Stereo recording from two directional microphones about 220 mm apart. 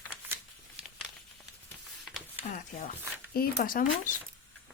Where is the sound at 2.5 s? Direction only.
35° left (ahead or behind).